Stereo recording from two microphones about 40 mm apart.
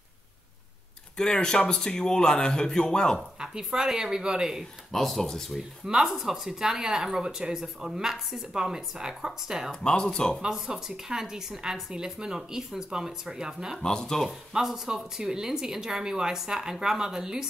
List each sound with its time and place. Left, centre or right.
1.1 s speech: centre
3.3 s speech: centre
4.9 s speech: centre
6.0 s speech: centre
9.7 s speech: left
10.4 s speech: centre
13.7 s speech: centre
14.5 s speech: centre